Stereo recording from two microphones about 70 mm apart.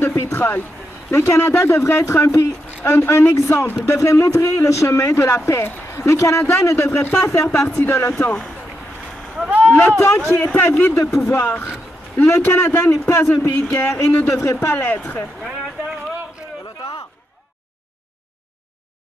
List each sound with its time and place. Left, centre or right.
0.0 s a sound: left
1.1 s speech: left
7.4 s speech: left
8.1 s speech: centre
9.7 s a sound: centre
9.9 s speech: left
13.0 s speech: left
14.8 s speech: left